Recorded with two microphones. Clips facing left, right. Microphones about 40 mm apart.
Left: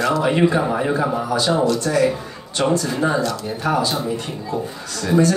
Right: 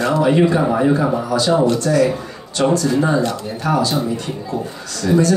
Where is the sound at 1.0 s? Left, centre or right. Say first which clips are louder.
Right 2 dB; left.